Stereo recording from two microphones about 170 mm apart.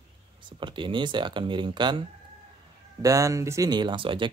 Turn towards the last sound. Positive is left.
turn(degrees=-30)  # may be behind; listen again after turning